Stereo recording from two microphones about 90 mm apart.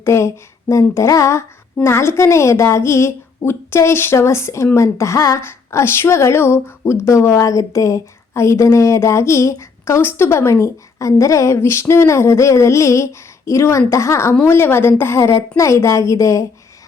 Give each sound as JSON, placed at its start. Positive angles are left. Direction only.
{"t": 0.0, "sound": "a woman's voice", "side_deg": 30}